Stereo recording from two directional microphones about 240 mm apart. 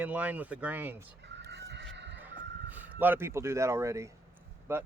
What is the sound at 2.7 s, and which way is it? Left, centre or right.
Speech, centre.